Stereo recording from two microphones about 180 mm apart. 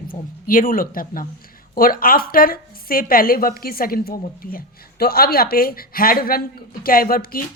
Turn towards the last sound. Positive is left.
turn(degrees=55)  # may be behind; listen again after turning